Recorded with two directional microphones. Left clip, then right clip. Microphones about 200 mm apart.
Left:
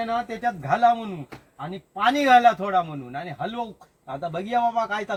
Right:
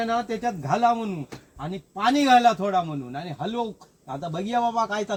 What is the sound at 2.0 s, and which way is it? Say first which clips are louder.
A man's voice: left 1 dB; 25° left (ahead or behind).